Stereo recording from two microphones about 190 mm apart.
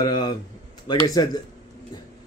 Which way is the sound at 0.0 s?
20° left (ahead or behind).